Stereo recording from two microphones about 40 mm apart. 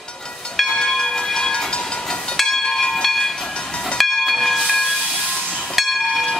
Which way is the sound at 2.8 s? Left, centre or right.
Centre.